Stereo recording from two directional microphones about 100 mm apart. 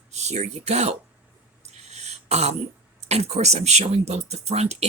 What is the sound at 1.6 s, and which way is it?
Throat clearing, 90° right.